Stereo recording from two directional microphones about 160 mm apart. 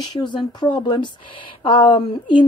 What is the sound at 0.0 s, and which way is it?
A woman's voice, 25° left (ahead or behind).